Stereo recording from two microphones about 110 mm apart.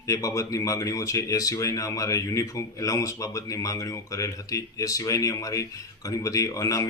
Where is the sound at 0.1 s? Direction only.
30° left (ahead or behind).